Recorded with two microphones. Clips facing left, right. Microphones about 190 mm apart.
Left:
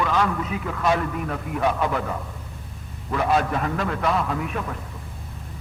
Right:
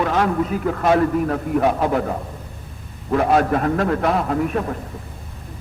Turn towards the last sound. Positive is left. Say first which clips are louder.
# right 7 dB
turn(degrees=-40)  # may be behind; listen again after turning